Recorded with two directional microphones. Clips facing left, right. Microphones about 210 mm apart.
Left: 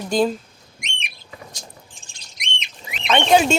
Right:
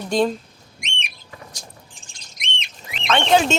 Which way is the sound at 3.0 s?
15° left (ahead or behind).